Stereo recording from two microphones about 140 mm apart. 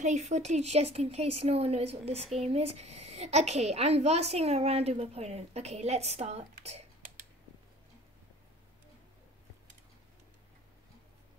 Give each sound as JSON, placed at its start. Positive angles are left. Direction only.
{"t": 0.0, "sound": "a woman's voice", "side_deg": -55}